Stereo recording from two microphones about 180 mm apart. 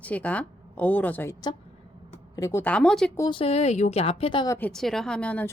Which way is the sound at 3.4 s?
35° left (ahead or behind).